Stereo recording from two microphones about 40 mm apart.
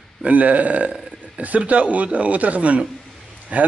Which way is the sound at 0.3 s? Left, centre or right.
Right.